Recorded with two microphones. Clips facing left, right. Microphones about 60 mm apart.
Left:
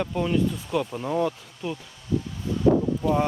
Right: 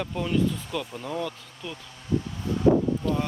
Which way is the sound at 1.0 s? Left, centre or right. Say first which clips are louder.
Left 6 dB; left.